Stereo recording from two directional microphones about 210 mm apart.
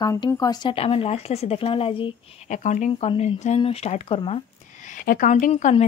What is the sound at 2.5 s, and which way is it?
Speech, 35° left (ahead or behind).